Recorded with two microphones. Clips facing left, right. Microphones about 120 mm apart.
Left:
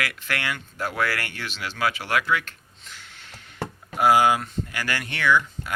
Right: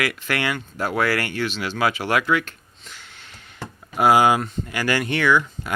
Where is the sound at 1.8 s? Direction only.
20° right (ahead or behind).